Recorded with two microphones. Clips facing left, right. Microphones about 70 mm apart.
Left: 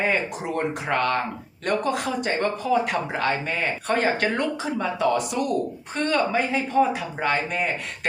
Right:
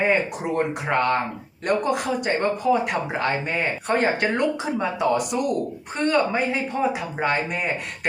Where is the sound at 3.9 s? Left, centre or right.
Centre.